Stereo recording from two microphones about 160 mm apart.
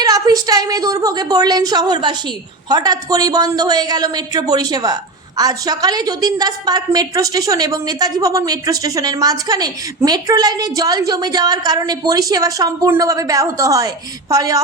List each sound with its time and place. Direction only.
0.0 s a woman's voice: 25° right (ahead or behind)